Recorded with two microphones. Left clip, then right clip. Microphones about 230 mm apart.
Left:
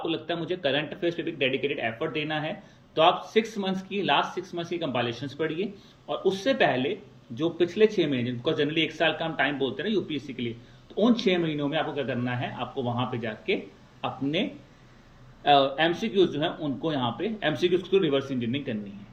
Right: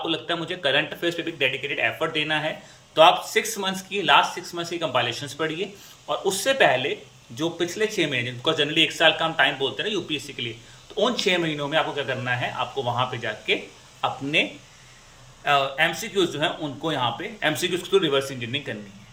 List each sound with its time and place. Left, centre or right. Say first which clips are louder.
0.0 s a man's voice: right 4 dB; right
5.1 s speech: right 4 dB; centre
5.4 s a man's voice: right 1 dB; right
15.4 s a man's voice: even; right